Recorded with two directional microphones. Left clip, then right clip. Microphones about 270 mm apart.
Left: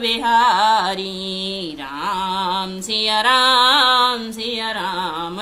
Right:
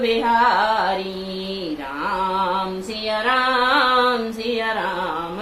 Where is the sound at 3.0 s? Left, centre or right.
Left.